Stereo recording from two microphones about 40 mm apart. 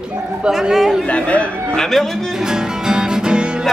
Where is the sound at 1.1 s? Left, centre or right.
Left.